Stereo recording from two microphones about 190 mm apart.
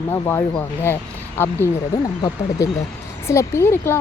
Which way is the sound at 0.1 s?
15° left (ahead or behind).